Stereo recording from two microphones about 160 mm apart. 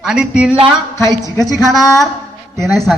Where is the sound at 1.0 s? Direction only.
20° left (ahead or behind).